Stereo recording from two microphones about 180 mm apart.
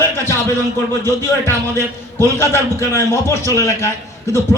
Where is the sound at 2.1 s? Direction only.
15° left (ahead or behind).